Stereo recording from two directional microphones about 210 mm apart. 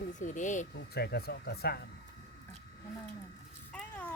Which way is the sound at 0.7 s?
50° left (ahead or behind).